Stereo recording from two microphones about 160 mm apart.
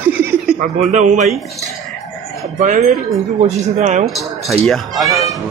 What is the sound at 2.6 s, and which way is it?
Speech, 55° right (ahead or behind).